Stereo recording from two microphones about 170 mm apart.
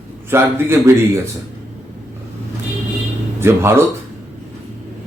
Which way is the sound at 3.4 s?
15° right (ahead or behind).